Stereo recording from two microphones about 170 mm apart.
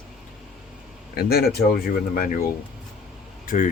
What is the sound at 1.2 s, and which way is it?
Speech, 65° left (ahead or behind).